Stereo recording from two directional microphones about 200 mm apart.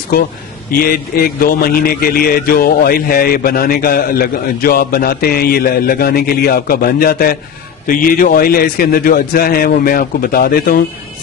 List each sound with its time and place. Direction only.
0.7 s a man's voice: 45° left (ahead or behind)